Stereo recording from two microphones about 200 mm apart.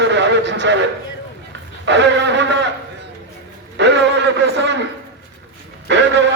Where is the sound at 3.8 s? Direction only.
60° right (ahead or behind).